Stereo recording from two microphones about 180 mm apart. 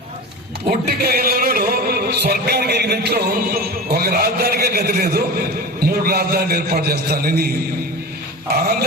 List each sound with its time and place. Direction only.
0.9 s music: 60° right (ahead or behind)